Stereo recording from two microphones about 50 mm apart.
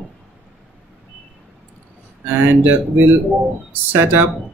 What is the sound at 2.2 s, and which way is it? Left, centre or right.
Speech, right.